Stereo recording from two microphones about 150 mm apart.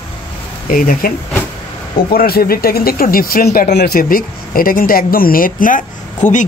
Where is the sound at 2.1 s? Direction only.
85° left.